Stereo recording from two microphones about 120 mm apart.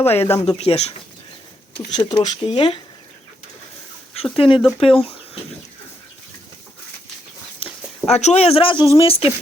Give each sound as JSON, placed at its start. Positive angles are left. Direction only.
{"t": 0.0, "sound": "speech", "side_deg": 20}
{"t": 0.4, "sound": "speech", "side_deg": 55}
{"t": 1.9, "sound": "speech", "side_deg": 40}
{"t": 4.1, "sound": "speech", "side_deg": 55}
{"t": 4.6, "sound": "speech", "side_deg": 0}
{"t": 7.6, "sound": "speech", "side_deg": 65}